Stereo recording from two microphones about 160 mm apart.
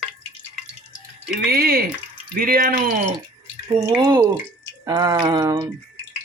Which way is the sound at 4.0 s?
25° right (ahead or behind).